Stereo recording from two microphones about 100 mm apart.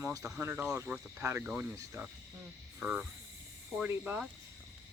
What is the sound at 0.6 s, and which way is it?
Speech, 35° right (ahead or behind).